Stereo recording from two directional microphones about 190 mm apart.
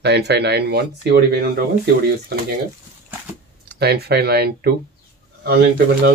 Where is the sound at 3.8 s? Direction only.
60° right (ahead or behind).